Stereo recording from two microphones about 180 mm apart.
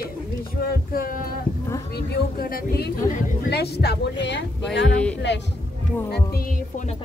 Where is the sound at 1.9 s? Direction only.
60° left (ahead or behind).